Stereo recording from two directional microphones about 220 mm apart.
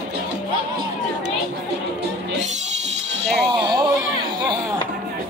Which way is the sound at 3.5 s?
20° right (ahead or behind).